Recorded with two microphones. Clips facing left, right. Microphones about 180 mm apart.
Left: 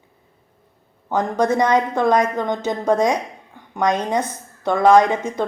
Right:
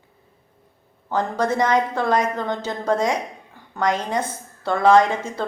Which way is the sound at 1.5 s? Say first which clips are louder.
Left 1 dB; 20° left (ahead or behind).